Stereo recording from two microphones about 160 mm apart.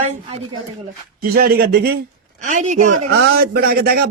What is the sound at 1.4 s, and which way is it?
Speech, 70° right (ahead or behind).